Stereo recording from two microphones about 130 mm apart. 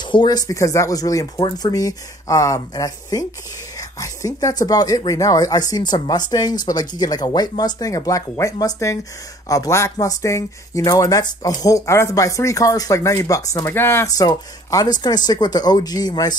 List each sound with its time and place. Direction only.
0.0 s speech: 35° left (ahead or behind); by 14.1 s 20° left (ahead or behind)
14.1 s speech: 30° left (ahead or behind)